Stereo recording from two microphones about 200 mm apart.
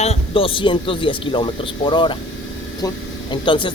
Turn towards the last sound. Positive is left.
turn(degrees=25)  # may be behind; listen again after turning